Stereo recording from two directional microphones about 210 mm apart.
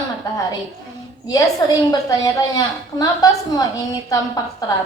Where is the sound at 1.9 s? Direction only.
15° left (ahead or behind).